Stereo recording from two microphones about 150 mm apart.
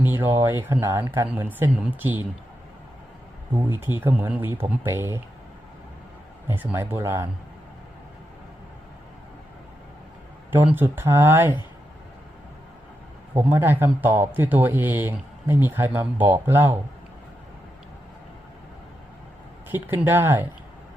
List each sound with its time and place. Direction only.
0.0 s speech: 15° right (ahead or behind)
3.5 s speech: 15° right (ahead or behind)
6.5 s speech: 15° right (ahead or behind)
10.5 s speech: 15° right (ahead or behind)
13.3 s speech: 15° right (ahead or behind)
19.7 s speech: 15° right (ahead or behind)